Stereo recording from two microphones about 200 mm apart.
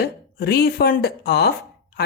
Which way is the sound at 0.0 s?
50° left (ahead or behind).